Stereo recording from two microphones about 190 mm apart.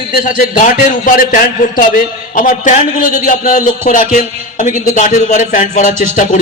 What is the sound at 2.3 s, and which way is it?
A man's voice, 45° left (ahead or behind).